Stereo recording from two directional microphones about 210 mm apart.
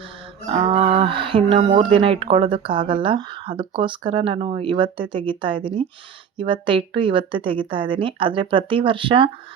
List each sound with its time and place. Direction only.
0.6 s speech: 25° right (ahead or behind)